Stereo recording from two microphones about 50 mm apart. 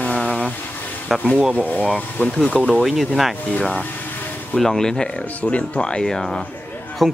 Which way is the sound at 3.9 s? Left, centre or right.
Left.